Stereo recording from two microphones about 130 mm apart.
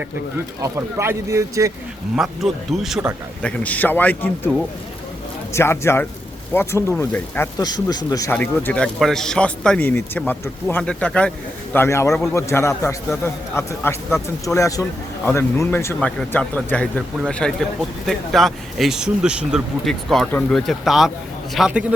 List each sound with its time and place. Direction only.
0.6 s speech: 20° right (ahead or behind)
2.1 s speech: centre (ahead or behind)
3.4 s a man's voice: 10° left (ahead or behind)
5.5 s a man's voice: 20° left (ahead or behind)
7.6 s speech: 30° left (ahead or behind)
8.3 s a man's voice: 15° left (ahead or behind)
11.7 s speech: 20° left (ahead or behind)
16.0 s a man's voice: 10° left (ahead or behind); by 21.9 s 10° right (ahead or behind)